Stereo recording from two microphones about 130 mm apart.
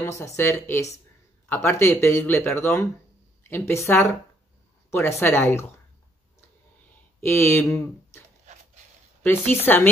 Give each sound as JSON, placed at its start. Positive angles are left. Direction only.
{"t": 0.0, "sound": "speech", "side_deg": 20}
{"t": 7.2, "sound": "speech", "side_deg": 20}
{"t": 9.2, "sound": "speech", "side_deg": 15}